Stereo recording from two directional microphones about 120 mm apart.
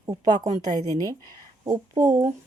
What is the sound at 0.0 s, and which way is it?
Speech, 35° right (ahead or behind).